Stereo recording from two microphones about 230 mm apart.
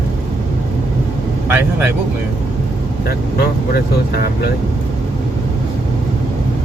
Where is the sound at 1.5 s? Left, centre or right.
Centre.